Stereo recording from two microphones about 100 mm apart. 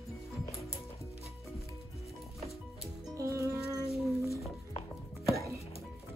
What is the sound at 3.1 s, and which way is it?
Music, 30° right (ahead or behind).